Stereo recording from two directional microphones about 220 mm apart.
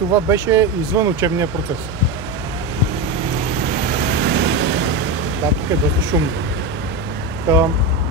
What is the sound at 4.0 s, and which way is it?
Vehicle, 50° right (ahead or behind).